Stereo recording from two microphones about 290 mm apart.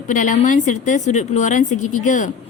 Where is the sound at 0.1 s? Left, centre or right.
Left.